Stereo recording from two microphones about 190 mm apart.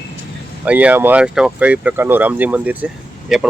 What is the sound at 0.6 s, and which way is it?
Speech, 5° right (ahead or behind).